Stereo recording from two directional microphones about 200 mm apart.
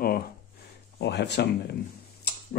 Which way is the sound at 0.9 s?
55° left (ahead or behind).